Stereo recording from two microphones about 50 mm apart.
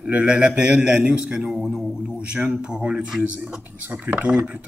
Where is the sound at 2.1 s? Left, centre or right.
Right.